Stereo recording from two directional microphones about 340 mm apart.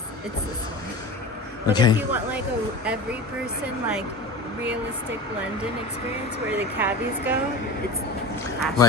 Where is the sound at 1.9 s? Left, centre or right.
Centre.